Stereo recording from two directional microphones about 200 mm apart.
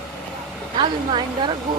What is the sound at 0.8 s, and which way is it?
Speech, 25° right (ahead or behind).